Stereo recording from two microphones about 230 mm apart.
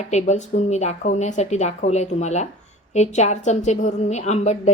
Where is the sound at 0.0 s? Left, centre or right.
Left.